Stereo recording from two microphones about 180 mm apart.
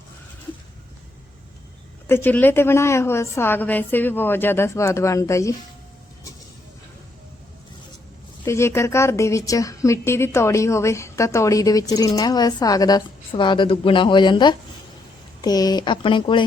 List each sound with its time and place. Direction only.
2.0 s a woman's voice: 10° left (ahead or behind)
8.4 s a woman's voice: 15° left (ahead or behind)